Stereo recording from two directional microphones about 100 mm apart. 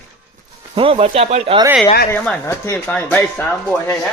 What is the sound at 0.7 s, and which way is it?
Speech, 65° right (ahead or behind).